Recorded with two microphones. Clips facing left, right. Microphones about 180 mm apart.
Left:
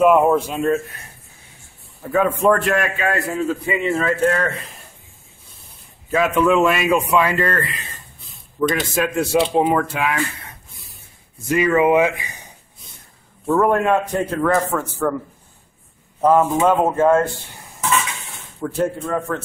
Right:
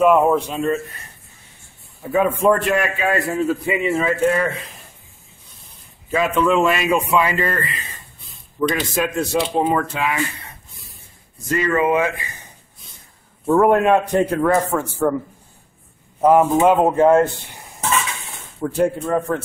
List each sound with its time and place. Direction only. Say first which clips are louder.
0.0 s a man's voice: left 1 dB; centre (ahead or behind)
2.0 s a man's voice: even; 5° right (ahead or behind)
6.1 s a man's voice: left 1 dB; 5° left (ahead or behind)
11.4 s speech: left 3 dB; 10° left (ahead or behind)
13.5 s speech: right 2 dB; 15° right (ahead or behind)
16.2 s speech: right 2 dB; 15° right (ahead or behind)
18.6 s speech: right 2 dB; 15° right (ahead or behind)